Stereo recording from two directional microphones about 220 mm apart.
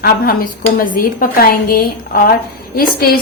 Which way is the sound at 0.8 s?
40° left (ahead or behind).